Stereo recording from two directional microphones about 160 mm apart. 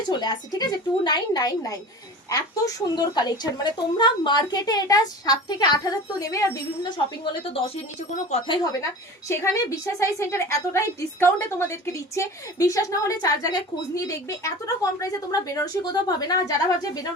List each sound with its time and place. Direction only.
0.1 s a woman's voice: 25° left (ahead or behind)
8.4 s a woman's voice: 25° left (ahead or behind)